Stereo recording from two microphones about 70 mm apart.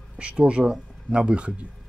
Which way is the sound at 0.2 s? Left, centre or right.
Centre.